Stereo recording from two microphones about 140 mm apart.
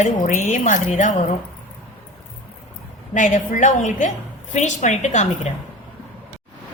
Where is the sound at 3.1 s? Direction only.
65° left (ahead or behind).